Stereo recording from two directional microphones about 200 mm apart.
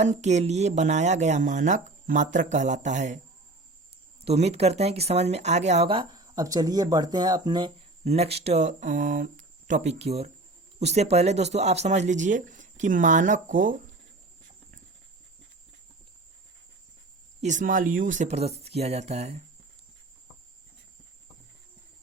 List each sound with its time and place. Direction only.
0.0 s speech: 35° right (ahead or behind)
4.2 s speech: 30° right (ahead or behind)
17.4 s speech: 40° right (ahead or behind)